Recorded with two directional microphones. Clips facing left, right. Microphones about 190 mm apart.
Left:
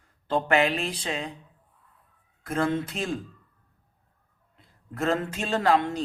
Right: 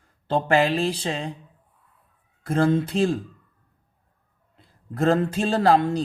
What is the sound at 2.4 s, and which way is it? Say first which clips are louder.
Speech: right 5 dB; 30° right (ahead or behind).